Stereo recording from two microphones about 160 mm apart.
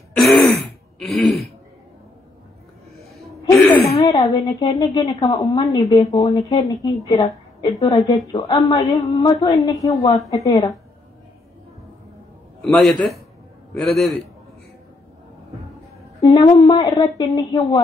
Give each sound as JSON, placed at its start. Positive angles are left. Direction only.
{"t": 0.1, "sound": "throat clearing", "side_deg": 0}
{"t": 3.4, "sound": "a sound", "side_deg": 10}
{"t": 4.0, "sound": "a woman's voice", "side_deg": 25}
{"t": 12.6, "sound": "a man's voice", "side_deg": 0}
{"t": 16.3, "sound": "a woman's voice", "side_deg": 30}